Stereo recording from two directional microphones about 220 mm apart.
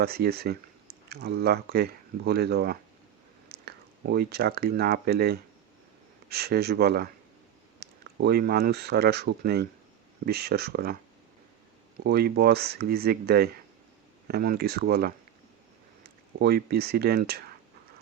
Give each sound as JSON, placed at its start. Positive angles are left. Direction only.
{"t": 0.0, "sound": "speech", "side_deg": -45}
{"t": 12.0, "sound": "speech", "side_deg": -45}
{"t": 16.4, "sound": "speech", "side_deg": -45}